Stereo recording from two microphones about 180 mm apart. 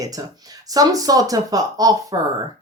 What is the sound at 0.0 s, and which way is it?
Speech, 20° right (ahead or behind).